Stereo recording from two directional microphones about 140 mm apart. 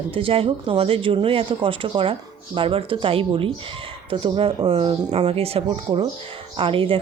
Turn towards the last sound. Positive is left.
turn(degrees=-40)  # may be behind; listen again after turning